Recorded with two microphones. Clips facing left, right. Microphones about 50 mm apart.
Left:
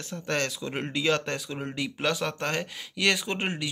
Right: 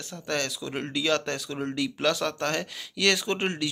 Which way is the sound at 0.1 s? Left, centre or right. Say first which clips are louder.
Left 1 dB; left.